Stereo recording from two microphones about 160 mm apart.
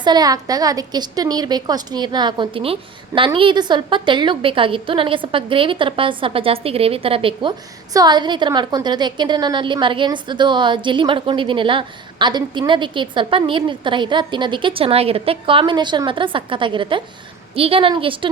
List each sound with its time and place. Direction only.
0.0 s a woman's voice: 25° right (ahead or behind)